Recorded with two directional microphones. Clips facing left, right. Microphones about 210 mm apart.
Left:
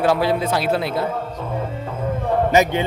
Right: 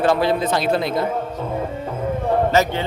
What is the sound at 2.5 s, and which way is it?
Speech, 15° left (ahead or behind).